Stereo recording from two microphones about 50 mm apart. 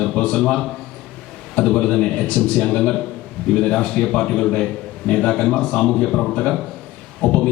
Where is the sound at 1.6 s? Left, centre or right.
Centre.